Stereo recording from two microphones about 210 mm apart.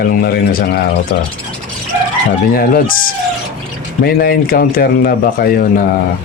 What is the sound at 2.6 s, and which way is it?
Speech, 45° left (ahead or behind).